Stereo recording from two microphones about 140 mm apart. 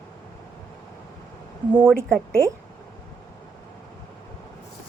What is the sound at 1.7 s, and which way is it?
Speech, 10° right (ahead or behind).